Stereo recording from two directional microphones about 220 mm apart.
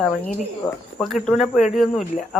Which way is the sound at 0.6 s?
10° left (ahead or behind).